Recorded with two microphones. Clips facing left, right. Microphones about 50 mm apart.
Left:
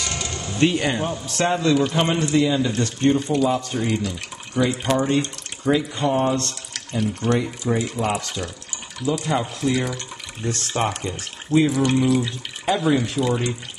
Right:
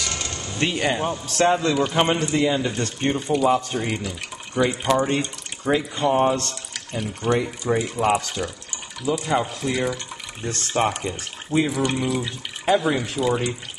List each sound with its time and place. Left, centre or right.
0.0 s a sound: centre
1.3 s speech: centre
2.5 s speech: centre
5.6 s speech: centre
5.9 s speech: centre